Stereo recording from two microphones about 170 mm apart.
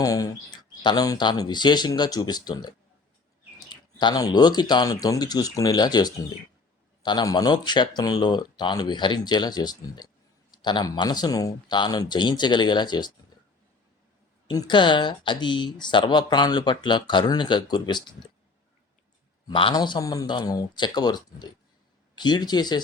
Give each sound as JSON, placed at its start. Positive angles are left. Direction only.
{"t": 0.0, "sound": "speech", "side_deg": 20}
{"t": 14.4, "sound": "speech", "side_deg": 25}
{"t": 19.5, "sound": "speech", "side_deg": 25}